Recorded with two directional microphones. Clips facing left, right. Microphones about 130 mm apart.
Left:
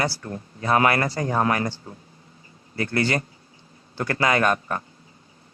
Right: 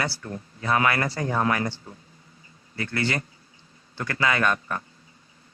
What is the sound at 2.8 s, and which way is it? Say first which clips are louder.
Speech: left 4 dB; 35° left (ahead or behind).